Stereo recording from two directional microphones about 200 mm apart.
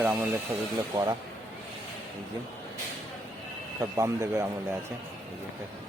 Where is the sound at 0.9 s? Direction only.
20° right (ahead or behind).